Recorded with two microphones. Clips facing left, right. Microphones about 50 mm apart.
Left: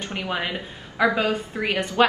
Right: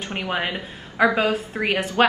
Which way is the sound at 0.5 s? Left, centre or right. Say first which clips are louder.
Right 1 dB; right.